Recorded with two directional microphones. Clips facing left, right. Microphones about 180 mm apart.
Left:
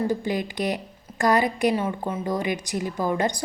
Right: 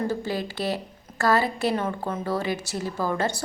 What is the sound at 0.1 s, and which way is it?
A woman's voice, 15° left (ahead or behind).